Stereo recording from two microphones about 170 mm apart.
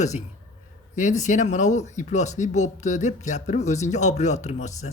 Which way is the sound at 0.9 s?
45° left (ahead or behind).